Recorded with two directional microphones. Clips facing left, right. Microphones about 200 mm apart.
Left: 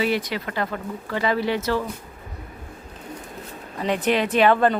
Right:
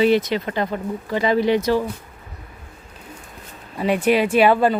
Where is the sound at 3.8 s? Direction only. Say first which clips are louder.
Right 4 dB; 10° right (ahead or behind).